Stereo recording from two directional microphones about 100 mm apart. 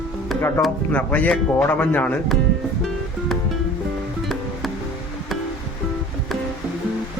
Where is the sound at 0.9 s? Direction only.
15° left (ahead or behind).